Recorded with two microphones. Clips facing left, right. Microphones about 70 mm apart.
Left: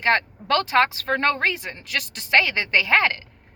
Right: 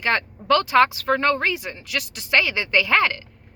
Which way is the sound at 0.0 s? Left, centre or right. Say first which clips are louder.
Left 2 dB; left.